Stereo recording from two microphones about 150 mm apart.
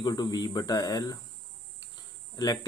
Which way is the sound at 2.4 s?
25° left (ahead or behind).